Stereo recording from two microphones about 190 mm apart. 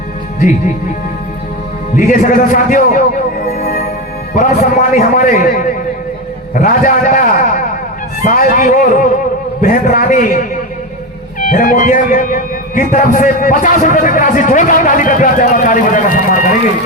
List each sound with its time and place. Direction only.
2.0 s a man's voice: 45° left (ahead or behind)
3.4 s music: 40° left (ahead or behind)
4.4 s a man's voice: 40° left (ahead or behind)
11.5 s a man's voice: 45° left (ahead or behind)